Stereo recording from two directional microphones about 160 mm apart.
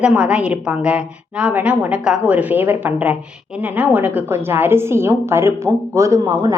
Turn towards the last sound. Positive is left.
turn(degrees=-20)  # may be behind; listen again after turning